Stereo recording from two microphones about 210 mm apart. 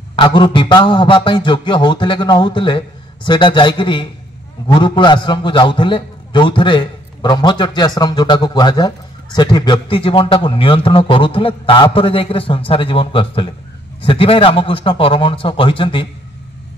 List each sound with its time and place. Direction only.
0.1 s a man's voice: 20° left (ahead or behind)